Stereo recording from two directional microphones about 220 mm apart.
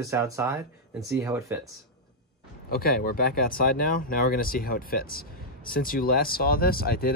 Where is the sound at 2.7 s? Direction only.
45° left (ahead or behind).